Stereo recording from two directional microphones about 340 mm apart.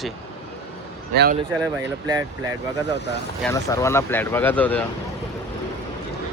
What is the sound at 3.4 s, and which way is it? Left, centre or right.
Speech, centre.